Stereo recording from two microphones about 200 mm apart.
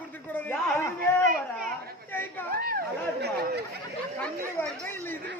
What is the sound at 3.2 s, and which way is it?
Speech, 55° right (ahead or behind).